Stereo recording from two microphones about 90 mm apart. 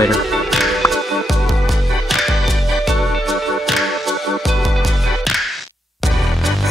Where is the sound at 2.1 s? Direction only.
Centre (ahead or behind).